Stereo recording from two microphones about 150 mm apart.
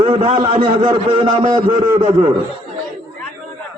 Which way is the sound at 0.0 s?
40° right (ahead or behind).